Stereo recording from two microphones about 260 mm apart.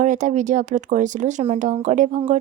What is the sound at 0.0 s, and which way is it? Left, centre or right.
Speech, right.